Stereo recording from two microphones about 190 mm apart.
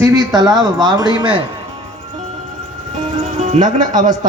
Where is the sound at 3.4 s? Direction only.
40° right (ahead or behind).